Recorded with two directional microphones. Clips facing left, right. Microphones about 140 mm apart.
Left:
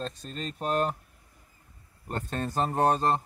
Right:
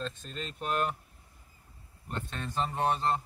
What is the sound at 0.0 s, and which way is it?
Speech, 40° left (ahead or behind).